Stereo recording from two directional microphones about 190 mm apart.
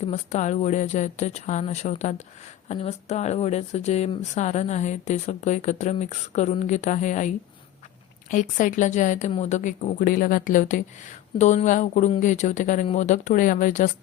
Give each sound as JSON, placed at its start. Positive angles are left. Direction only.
{"t": 0.1, "sound": "speech", "side_deg": 35}